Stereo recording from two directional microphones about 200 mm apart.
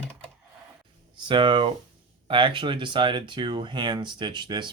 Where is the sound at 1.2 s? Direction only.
25° right (ahead or behind).